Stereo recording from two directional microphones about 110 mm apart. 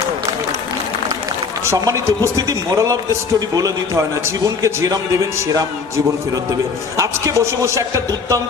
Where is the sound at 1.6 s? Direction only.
30° right (ahead or behind).